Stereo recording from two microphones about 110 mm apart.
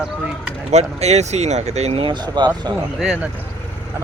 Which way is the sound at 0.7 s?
80° right.